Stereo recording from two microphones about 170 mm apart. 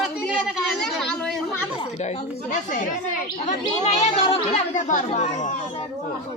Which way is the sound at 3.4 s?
40° left (ahead or behind).